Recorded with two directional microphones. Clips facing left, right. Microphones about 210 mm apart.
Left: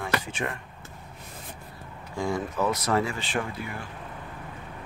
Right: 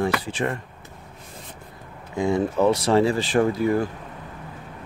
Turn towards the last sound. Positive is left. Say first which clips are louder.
# right 14 dB
turn(degrees=-40)  # may be behind; listen again after turning